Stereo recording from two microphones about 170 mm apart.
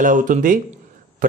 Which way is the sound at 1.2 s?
50° right (ahead or behind).